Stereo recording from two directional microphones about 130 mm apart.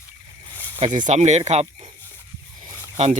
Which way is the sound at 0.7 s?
70° right (ahead or behind).